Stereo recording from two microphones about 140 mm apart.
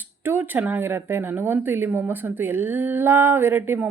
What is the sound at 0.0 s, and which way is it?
Speech, 15° right (ahead or behind).